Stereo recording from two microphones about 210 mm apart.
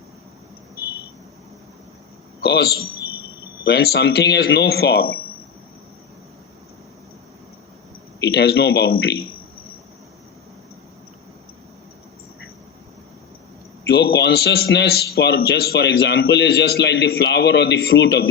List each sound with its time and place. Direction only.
2.4 s a man's voice: 50° left (ahead or behind)
8.2 s a man's voice: 50° left (ahead or behind)
13.8 s a man's voice: 50° left (ahead or behind)